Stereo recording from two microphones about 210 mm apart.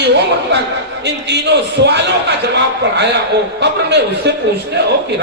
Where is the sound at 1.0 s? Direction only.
55° right (ahead or behind).